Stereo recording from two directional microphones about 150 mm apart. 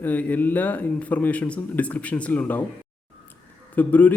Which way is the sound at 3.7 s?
10° left (ahead or behind).